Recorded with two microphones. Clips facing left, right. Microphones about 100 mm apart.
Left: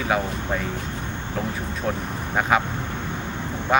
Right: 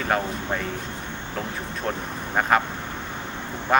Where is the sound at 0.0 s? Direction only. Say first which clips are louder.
Left 1 dB; centre (ahead or behind).